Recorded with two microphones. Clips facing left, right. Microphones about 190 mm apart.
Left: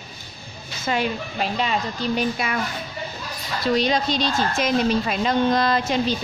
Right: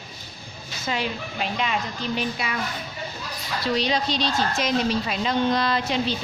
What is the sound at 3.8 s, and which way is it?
A woman's voice, 50° left (ahead or behind).